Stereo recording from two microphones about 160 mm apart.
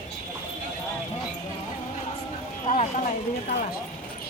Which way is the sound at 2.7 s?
50° left (ahead or behind).